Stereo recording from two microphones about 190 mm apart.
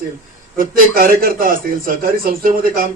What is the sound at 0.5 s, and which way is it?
A man's voice, 50° right (ahead or behind).